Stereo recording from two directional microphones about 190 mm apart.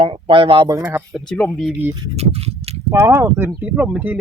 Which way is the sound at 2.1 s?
30° right (ahead or behind).